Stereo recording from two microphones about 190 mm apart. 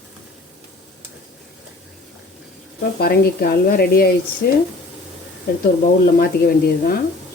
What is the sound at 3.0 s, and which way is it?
Speech, 55° left (ahead or behind).